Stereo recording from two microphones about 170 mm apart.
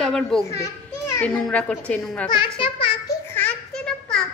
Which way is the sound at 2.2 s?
30° left (ahead or behind).